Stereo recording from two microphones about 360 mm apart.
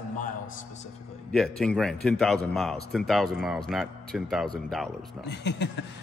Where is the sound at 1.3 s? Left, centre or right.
Centre.